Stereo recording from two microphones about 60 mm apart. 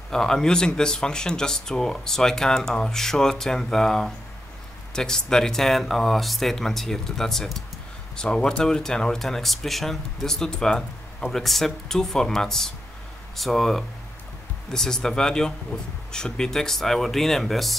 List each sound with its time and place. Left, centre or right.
0.1 s speech: centre